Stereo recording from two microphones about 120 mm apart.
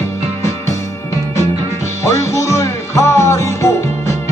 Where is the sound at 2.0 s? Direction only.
25° left (ahead or behind).